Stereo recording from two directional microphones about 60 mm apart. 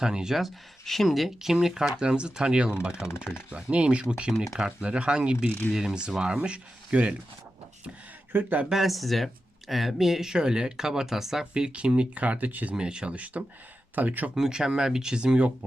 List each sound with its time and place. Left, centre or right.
0.0 s speech: centre
4.3 s speech: centre
5.5 s speech: left
5.7 s speech: centre
8.3 s speech: right
8.7 s speech: centre; by 12.7 s right
12.7 s speech: centre
14.3 s speech: centre